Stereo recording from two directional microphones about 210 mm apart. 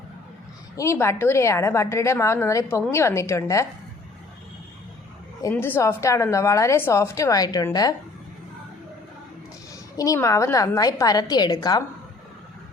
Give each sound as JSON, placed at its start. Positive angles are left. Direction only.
{"t": 0.8, "sound": "a woman's voice", "side_deg": 15}
{"t": 5.4, "sound": "a woman's voice", "side_deg": 10}
{"t": 10.0, "sound": "a woman's voice", "side_deg": 15}